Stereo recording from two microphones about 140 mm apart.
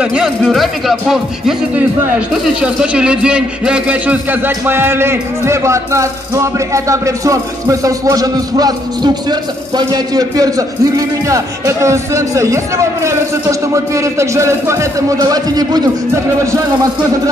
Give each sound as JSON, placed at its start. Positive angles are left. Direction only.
{"t": 0.0, "sound": "a man's voice", "side_deg": -5}